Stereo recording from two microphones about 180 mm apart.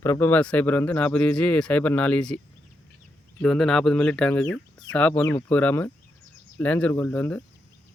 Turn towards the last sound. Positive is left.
turn(degrees=10)  # may be behind; listen again after turning